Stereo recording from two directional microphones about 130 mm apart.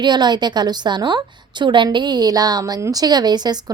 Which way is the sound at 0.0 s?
35° right (ahead or behind).